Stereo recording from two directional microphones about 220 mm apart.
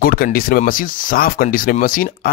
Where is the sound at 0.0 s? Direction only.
40° left (ahead or behind).